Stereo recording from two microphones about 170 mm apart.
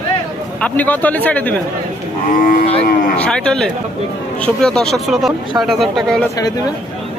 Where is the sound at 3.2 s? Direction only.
5° left (ahead or behind).